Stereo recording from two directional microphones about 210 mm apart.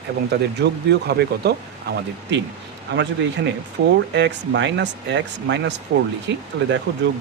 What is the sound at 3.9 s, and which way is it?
Speech, 60° right (ahead or behind).